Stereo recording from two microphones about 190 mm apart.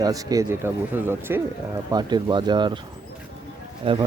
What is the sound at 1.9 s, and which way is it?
Speech, 25° right (ahead or behind).